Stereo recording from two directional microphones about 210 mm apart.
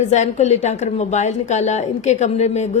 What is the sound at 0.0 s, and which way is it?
Speech, 35° left (ahead or behind).